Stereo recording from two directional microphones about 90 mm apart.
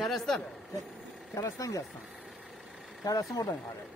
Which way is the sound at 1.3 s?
35° left (ahead or behind).